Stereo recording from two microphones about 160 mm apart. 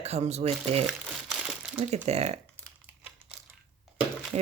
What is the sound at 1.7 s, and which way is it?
Crumpling, centre (ahead or behind).